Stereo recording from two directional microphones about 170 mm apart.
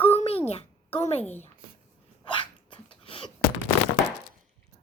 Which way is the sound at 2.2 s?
30° left (ahead or behind).